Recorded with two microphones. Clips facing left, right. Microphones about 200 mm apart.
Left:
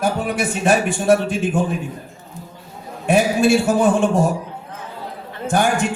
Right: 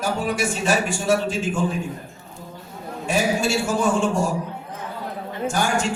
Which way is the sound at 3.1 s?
60° left (ahead or behind).